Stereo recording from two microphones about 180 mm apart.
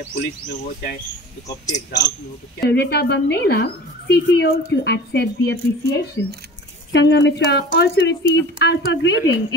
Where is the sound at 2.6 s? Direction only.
65° left (ahead or behind).